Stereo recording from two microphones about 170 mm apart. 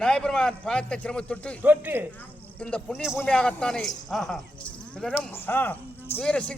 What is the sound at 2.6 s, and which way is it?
Speech, 5° left (ahead or behind).